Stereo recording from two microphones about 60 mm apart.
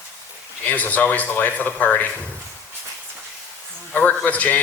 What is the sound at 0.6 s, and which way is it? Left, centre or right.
A man's voice, left.